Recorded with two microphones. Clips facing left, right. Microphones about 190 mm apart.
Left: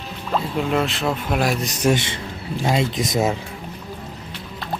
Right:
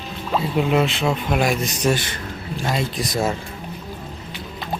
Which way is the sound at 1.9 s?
25° left (ahead or behind).